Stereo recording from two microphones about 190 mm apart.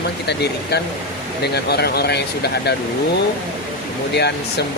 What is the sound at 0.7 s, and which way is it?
Speech, 60° left (ahead or behind).